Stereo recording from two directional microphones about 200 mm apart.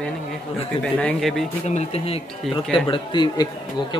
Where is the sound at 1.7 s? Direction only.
30° left (ahead or behind).